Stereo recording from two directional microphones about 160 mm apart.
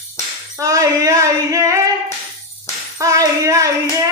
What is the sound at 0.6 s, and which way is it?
Music, 20° right (ahead or behind).